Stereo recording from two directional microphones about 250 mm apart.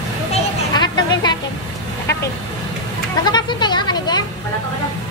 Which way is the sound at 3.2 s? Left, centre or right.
Centre.